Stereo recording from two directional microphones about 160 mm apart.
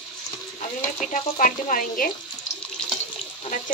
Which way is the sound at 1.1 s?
55° left (ahead or behind).